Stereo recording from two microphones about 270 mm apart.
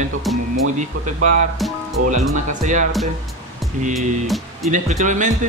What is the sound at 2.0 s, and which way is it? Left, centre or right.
Speech, right.